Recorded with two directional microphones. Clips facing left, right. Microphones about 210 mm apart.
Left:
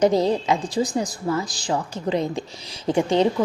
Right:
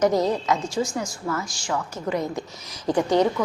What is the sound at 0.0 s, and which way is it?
A woman's voice, 30° left (ahead or behind).